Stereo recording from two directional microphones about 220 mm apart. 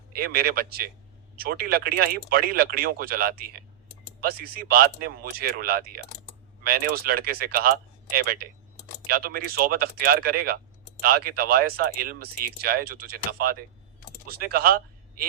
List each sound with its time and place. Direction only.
0.1 s speech: 45° right (ahead or behind)
14.3 s speech: 45° right (ahead or behind)